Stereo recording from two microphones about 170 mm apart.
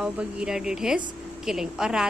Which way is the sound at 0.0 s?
5° right (ahead or behind).